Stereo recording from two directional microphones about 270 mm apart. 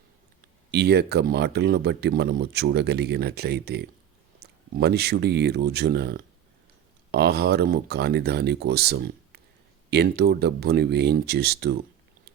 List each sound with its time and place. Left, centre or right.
0.7 s speech: right